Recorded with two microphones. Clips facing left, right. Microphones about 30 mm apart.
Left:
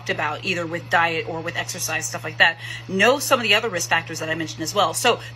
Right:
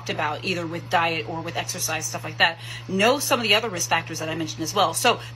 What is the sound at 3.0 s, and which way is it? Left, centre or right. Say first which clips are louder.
Speech: left 3 dB; left.